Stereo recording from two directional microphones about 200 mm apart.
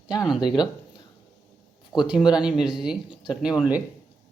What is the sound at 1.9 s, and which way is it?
Speech, centre (ahead or behind).